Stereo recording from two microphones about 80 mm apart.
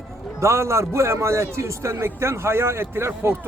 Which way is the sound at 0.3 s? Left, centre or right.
Right.